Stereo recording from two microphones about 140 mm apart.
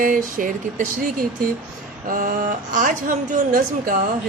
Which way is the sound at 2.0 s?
80° right.